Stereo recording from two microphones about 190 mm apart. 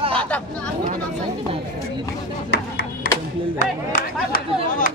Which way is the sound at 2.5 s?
60° left (ahead or behind).